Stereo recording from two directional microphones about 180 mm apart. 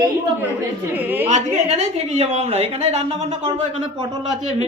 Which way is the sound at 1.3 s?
40° right (ahead or behind).